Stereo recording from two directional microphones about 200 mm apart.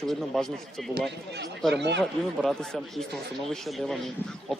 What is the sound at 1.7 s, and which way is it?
Speech, 60° right (ahead or behind).